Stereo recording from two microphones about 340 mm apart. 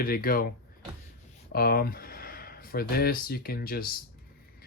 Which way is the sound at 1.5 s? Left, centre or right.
Left.